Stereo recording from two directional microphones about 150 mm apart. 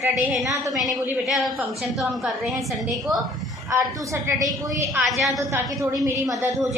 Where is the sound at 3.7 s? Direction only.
20° right (ahead or behind).